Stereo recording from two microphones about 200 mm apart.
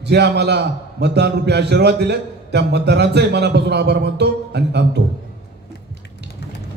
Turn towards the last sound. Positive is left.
turn(degrees=-55)  # may be behind; listen again after turning